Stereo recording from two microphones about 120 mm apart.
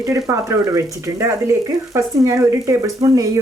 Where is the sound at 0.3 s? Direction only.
30° right (ahead or behind).